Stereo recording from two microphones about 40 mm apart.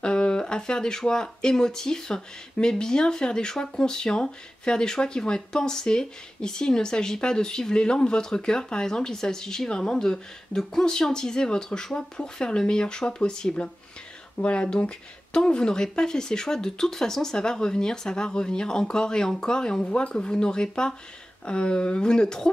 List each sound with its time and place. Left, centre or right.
0.0 s speech: left